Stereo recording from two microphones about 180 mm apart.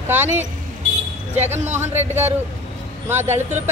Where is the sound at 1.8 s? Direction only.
15° right (ahead or behind).